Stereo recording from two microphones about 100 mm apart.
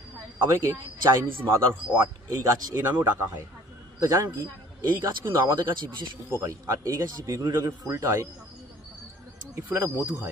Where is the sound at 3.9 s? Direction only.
30° right (ahead or behind).